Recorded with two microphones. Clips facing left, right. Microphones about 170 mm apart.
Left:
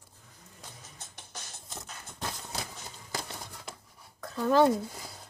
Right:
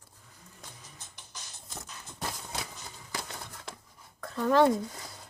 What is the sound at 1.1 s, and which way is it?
Music, 55° left (ahead or behind).